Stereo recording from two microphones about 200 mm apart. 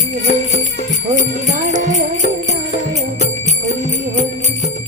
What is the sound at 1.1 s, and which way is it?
Speech, 40° right (ahead or behind).